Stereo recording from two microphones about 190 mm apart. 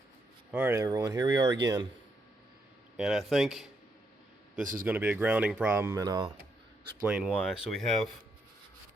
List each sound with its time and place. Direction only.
0.5 s a man's voice: 10° right (ahead or behind)
3.0 s speech: centre (ahead or behind)
4.6 s speech: 45° right (ahead or behind)
4.9 s speech: 10° right (ahead or behind)
7.3 s speech: centre (ahead or behind)